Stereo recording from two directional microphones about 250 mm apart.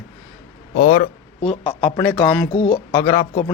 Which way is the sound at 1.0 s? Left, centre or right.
Left.